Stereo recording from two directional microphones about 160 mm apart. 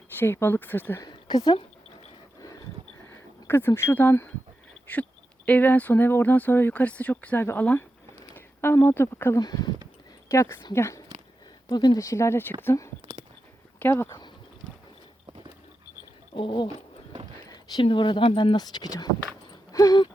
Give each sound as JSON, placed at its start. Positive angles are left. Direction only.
{"t": 0.2, "sound": "speech", "side_deg": 15}
{"t": 1.0, "sound": "speech", "side_deg": 25}
{"t": 3.1, "sound": "speech", "side_deg": 15}
{"t": 16.3, "sound": "speech", "side_deg": 35}
{"t": 19.7, "sound": "a sound", "side_deg": 25}